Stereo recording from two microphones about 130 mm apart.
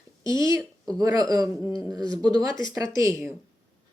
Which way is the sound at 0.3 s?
25° right (ahead or behind).